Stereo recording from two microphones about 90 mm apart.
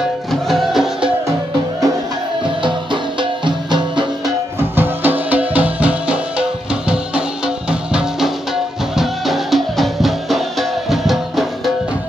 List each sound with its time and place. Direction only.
0.3 s music: centre (ahead or behind)
2.6 s music: 65° right (ahead or behind)
4.6 s music: 20° right (ahead or behind); by 11.7 s centre (ahead or behind)